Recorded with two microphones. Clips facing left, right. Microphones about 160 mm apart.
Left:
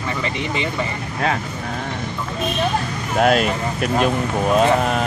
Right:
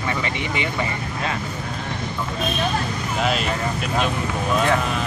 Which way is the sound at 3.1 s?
50° left (ahead or behind).